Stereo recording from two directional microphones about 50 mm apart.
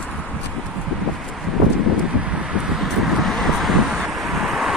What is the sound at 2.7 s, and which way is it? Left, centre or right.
Vehicle, centre.